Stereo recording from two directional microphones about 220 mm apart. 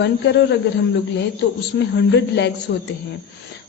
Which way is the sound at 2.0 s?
50° left (ahead or behind).